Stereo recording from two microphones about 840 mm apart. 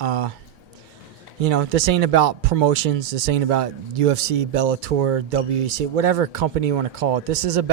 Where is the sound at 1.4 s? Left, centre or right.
Right.